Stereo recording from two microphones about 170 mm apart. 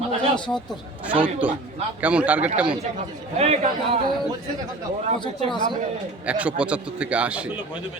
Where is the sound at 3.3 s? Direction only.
40° right (ahead or behind).